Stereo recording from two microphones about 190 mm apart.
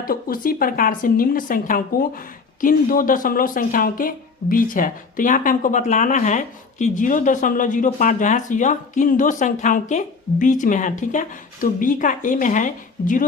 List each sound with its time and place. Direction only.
0.0 s a woman's voice: 50° left (ahead or behind)